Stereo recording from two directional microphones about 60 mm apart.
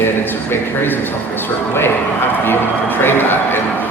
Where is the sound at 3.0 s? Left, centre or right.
Left.